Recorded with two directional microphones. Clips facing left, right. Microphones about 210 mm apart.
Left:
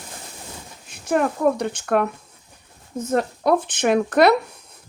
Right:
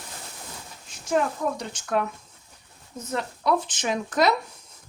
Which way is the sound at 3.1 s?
45° left (ahead or behind).